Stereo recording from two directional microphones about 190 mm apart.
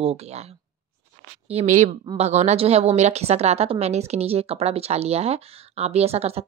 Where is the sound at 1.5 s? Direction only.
35° right (ahead or behind).